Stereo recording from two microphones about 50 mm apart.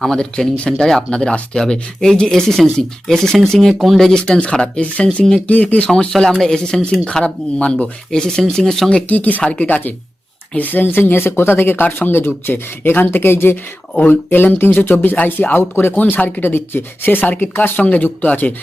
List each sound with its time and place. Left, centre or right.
0.0 s speech: centre
0.5 s speech: left
4.2 s speech: left
5.9 s speech: centre
8.1 s speech: centre
8.9 s speech: left
15.1 s speech: left
15.7 s speech: left